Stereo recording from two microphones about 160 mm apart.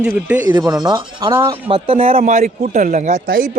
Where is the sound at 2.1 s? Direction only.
60° right (ahead or behind).